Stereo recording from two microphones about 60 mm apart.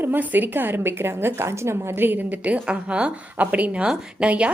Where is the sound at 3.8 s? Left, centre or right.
Centre.